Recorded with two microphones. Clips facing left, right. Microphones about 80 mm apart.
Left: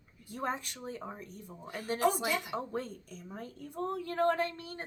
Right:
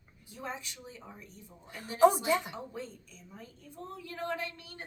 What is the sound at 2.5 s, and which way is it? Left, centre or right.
A woman's voice, left.